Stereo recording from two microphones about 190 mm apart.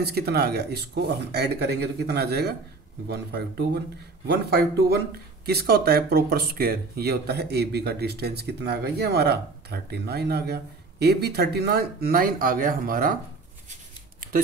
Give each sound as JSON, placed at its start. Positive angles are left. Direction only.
{"t": 0.0, "sound": "speech", "side_deg": -55}